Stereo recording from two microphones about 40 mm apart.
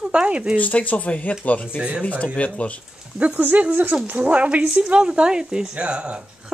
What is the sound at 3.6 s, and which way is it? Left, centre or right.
Speech, right.